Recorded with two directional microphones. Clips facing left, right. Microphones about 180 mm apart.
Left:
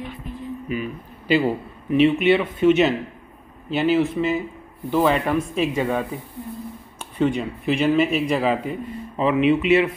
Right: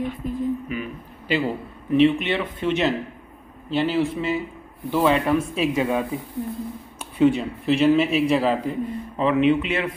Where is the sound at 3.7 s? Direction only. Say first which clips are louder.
Left 2 dB; centre (ahead or behind).